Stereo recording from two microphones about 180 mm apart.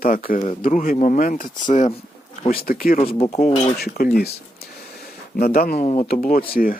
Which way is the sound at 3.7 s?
60° left (ahead or behind).